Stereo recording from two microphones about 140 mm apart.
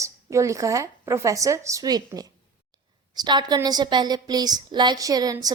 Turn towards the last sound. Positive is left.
turn(degrees=-25)  # may be behind; listen again after turning